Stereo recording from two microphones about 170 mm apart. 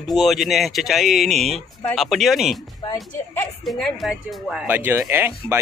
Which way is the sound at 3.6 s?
Centre (ahead or behind).